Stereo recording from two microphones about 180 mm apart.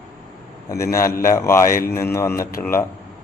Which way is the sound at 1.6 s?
50° left (ahead or behind).